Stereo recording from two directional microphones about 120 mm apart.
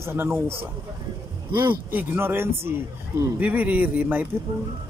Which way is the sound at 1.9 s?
15° right (ahead or behind).